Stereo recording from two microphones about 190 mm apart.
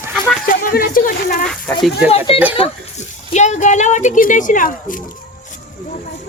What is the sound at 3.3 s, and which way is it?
Speech, 40° left (ahead or behind).